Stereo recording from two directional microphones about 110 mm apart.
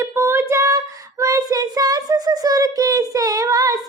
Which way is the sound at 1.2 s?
30° right (ahead or behind).